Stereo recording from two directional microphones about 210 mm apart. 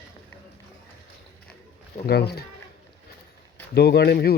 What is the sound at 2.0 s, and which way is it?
Speech, 50° left (ahead or behind).